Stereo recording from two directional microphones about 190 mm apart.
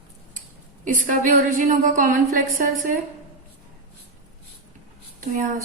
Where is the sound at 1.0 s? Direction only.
40° right (ahead or behind).